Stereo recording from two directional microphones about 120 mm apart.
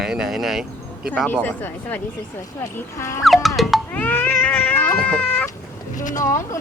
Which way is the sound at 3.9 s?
15° left (ahead or behind).